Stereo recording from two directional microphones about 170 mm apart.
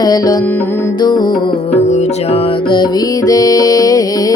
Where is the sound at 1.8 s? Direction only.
40° left (ahead or behind); by 4.3 s 20° left (ahead or behind).